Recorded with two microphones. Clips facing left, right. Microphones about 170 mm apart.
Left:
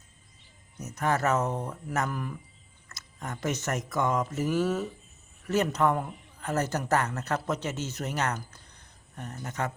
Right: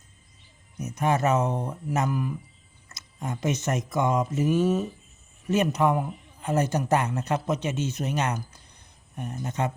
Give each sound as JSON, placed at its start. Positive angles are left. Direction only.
{"t": 0.8, "sound": "speech", "side_deg": -15}